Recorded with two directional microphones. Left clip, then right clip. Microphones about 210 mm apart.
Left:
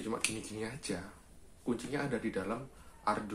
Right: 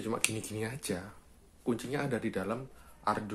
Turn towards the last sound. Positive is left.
turn(degrees=-40)  # may be behind; listen again after turning